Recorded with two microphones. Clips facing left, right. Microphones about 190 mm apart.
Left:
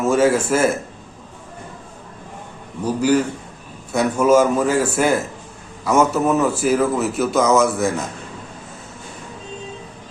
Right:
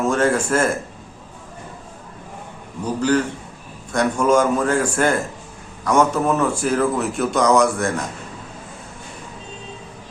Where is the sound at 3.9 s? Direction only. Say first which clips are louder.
Left 2 dB; 5° left (ahead or behind).